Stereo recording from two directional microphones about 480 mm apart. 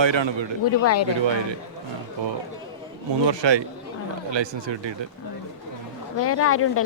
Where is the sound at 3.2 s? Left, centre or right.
Right.